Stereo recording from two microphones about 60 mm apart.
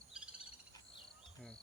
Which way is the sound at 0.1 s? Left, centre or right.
Centre.